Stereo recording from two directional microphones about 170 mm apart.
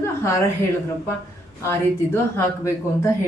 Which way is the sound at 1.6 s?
15° left (ahead or behind).